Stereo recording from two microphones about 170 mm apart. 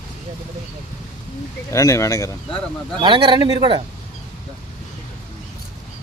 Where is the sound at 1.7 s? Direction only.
20° left (ahead or behind).